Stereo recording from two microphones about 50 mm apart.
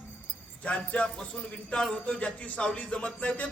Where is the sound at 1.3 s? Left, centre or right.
Left.